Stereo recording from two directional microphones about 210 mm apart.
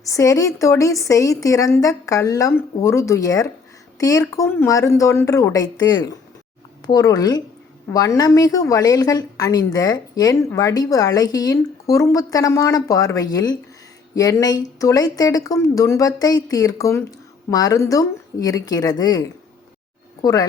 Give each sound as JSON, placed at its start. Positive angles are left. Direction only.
{"t": 0.0, "sound": "a woman's voice", "side_deg": 15}